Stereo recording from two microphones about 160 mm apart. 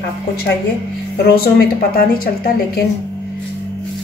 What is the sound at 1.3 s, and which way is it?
A woman's voice, 75° left (ahead or behind).